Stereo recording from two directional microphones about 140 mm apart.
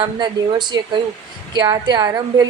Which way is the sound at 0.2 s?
30° right (ahead or behind).